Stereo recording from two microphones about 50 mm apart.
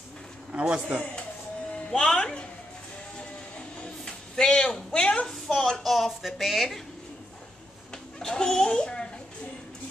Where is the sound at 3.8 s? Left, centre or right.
Centre.